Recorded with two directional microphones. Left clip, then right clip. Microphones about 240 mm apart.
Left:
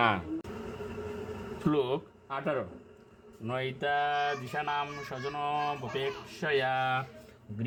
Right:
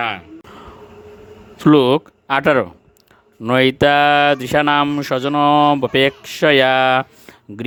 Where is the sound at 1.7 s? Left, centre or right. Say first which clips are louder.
Right 18 dB; right.